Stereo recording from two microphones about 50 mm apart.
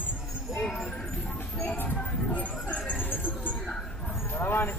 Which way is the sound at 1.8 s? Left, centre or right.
Left.